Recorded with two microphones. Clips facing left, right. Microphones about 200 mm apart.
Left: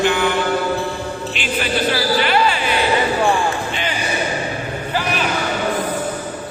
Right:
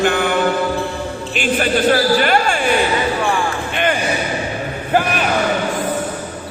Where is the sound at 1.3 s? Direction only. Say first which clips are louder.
Right 6 dB; 45° right (ahead or behind).